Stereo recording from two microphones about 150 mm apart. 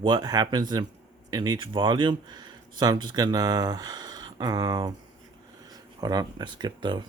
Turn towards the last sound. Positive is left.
turn(degrees=-30)  # may be behind; listen again after turning